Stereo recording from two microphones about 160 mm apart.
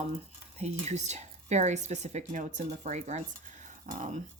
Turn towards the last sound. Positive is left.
turn(degrees=-50)  # may be behind; listen again after turning